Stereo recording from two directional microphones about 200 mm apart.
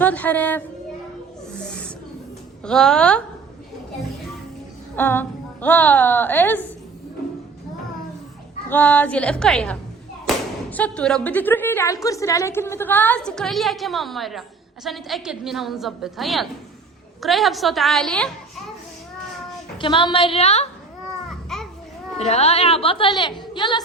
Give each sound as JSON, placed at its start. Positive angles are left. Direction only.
{"t": 0.0, "sound": "speech", "side_deg": 10}
{"t": 2.6, "sound": "a woman's voice", "side_deg": 5}
{"t": 4.9, "sound": "speech", "side_deg": 10}
{"t": 8.7, "sound": "a woman's voice", "side_deg": 10}
{"t": 19.8, "sound": "a woman's voice", "side_deg": 25}
{"t": 21.2, "sound": "babbling", "side_deg": 0}
{"t": 22.2, "sound": "a woman's voice", "side_deg": 30}